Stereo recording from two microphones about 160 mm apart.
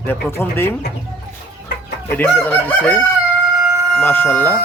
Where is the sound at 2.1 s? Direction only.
10° left (ahead or behind).